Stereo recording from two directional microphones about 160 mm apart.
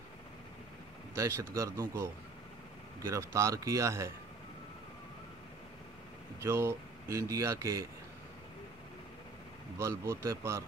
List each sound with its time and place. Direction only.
1.1 s speech: 20° right (ahead or behind)
3.1 s speech: 15° right (ahead or behind)
6.4 s speech: 15° right (ahead or behind)
9.8 s speech: 15° right (ahead or behind)